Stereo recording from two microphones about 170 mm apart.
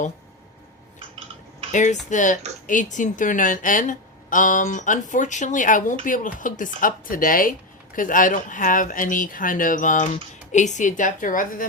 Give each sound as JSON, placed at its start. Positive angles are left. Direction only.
{"t": 1.7, "sound": "a woman's voice", "side_deg": 45}